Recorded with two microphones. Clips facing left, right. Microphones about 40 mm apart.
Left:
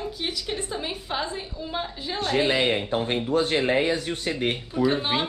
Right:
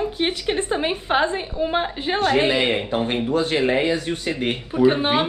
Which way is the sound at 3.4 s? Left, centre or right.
Right.